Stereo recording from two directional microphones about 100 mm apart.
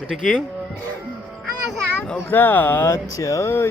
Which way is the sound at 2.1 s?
20° left (ahead or behind).